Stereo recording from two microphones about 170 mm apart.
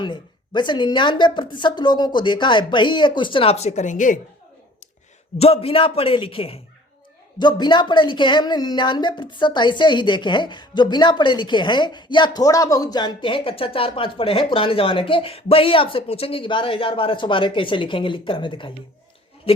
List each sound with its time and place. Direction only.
0.0 s speech: 25° left (ahead or behind); by 4.2 s 50° left (ahead or behind)
5.4 s a man's voice: 35° left (ahead or behind)